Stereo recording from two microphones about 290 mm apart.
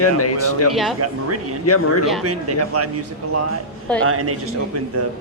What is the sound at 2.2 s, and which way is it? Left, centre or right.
Speech, right.